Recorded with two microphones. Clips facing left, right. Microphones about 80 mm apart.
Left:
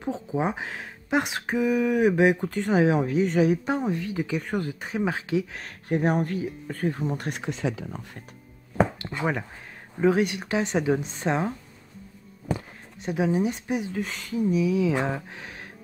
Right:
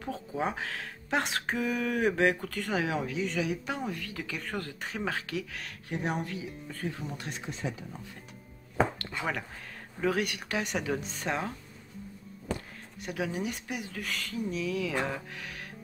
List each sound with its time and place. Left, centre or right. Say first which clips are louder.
0.0 s speech: left 6 dB; left
3.1 s speech: left 10 dB; left
5.6 s speech: left 9 dB; left
7.2 s speech: left 8 dB; left
8.7 s a sound: left 4 dB; centre
9.1 s speech: left 6 dB; left
13.0 s speech: left 9 dB; left